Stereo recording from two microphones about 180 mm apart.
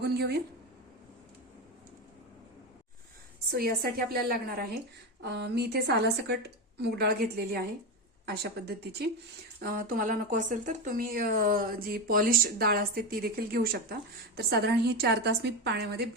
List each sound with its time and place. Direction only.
0.0 s speech: 65° right (ahead or behind)
3.5 s speech: 60° right (ahead or behind)
5.2 s speech: 65° right (ahead or behind)